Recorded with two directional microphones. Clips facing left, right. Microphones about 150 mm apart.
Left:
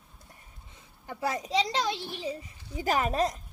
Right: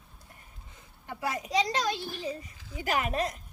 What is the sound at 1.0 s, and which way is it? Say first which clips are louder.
A child's voice: left 2 dB; 30° left (ahead or behind).